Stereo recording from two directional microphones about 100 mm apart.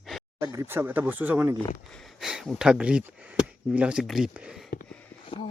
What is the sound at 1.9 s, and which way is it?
Speech, 5° left (ahead or behind).